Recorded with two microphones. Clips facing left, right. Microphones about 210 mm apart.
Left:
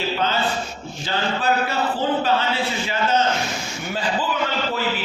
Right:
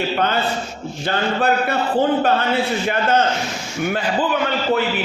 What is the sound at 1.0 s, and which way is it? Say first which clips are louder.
A man's voice: right 3 dB; 60° right (ahead or behind).